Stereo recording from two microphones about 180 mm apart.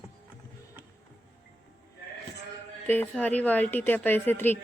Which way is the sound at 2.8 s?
10° left (ahead or behind).